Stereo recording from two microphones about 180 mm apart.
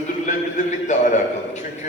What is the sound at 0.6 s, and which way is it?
Speech, 45° left (ahead or behind).